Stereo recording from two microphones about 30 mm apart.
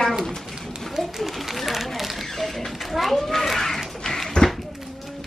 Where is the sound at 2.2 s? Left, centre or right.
Centre.